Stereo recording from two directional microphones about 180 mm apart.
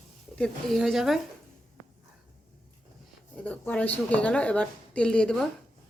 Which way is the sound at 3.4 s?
10° left (ahead or behind).